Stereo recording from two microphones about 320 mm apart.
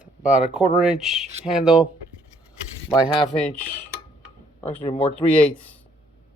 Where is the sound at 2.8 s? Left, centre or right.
Centre.